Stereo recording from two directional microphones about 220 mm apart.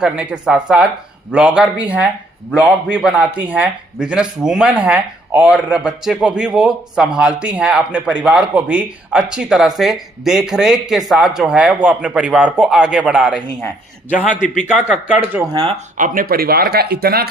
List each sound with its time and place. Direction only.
0.0 s a man's voice: 5° right (ahead or behind)
16.0 s speech: 35° right (ahead or behind)